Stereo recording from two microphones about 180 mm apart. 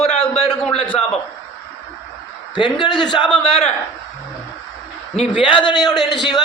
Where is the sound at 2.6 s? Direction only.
25° left (ahead or behind).